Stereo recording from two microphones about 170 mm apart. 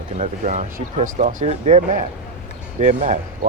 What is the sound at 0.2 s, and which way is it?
Speech, 45° right (ahead or behind).